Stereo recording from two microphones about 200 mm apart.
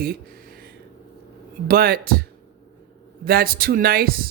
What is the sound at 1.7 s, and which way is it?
Speech, 50° right (ahead or behind).